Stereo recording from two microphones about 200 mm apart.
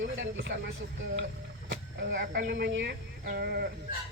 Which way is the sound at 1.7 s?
60° right (ahead or behind).